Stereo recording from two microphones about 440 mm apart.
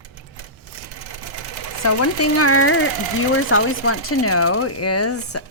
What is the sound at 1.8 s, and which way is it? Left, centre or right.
Speech, left.